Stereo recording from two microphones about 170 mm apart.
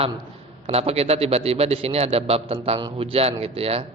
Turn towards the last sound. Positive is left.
turn(degrees=-35)  # may be behind; listen again after turning